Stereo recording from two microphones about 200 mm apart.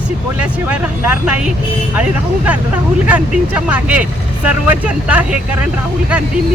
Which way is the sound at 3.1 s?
5° right (ahead or behind).